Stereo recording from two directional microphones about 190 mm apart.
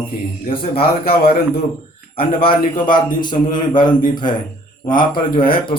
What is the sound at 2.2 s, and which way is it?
Speech, 30° left (ahead or behind).